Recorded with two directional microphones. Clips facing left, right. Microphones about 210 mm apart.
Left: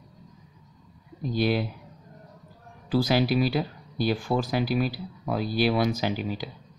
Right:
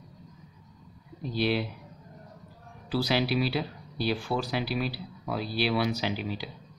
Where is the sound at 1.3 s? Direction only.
45° left (ahead or behind).